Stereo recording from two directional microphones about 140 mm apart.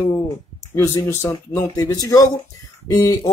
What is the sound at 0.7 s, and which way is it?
Speech, 20° left (ahead or behind).